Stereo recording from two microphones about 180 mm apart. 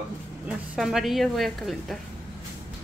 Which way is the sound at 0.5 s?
5° right (ahead or behind).